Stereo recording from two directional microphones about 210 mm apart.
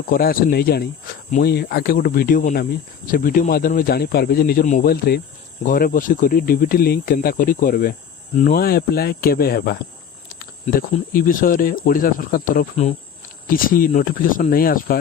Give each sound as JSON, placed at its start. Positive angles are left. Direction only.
{"t": 0.1, "sound": "speech", "side_deg": 45}
{"t": 10.2, "sound": "cricket", "side_deg": 45}
{"t": 10.9, "sound": "speech", "side_deg": 40}